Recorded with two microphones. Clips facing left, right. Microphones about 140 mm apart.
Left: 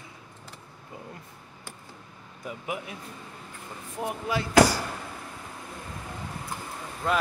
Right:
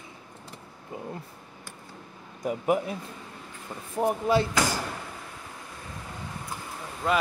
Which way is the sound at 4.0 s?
45° right (ahead or behind).